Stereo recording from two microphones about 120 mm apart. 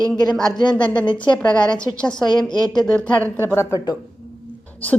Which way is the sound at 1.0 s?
40° left (ahead or behind).